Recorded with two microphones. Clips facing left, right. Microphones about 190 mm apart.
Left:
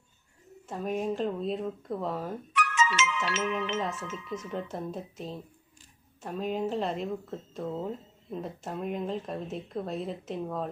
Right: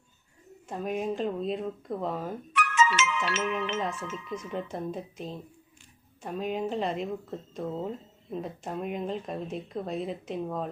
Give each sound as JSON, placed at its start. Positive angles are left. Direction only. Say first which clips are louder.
{"t": 0.7, "sound": "speech", "louder": "even", "side_deg": 0}
{"t": 2.5, "sound": "music", "louder": "right 3 dB", "side_deg": -55}
{"t": 3.8, "sound": "speech", "louder": "right 1 dB", "side_deg": 0}
{"t": 7.6, "sound": "speech", "louder": "right 1 dB", "side_deg": -15}
{"t": 8.3, "sound": "speech", "louder": "right 1 dB", "side_deg": 0}